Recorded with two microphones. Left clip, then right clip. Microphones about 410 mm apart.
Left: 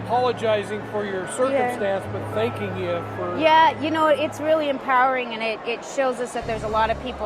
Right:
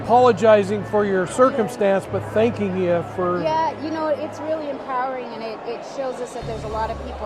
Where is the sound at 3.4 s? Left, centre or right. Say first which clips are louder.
Left 5 dB; left.